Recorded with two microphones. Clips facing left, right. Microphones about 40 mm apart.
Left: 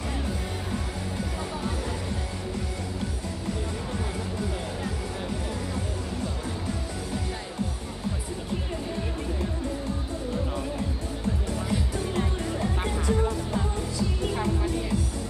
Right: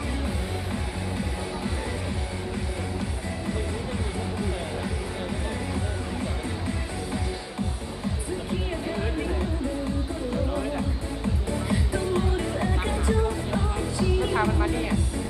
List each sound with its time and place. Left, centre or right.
11.9 s music: right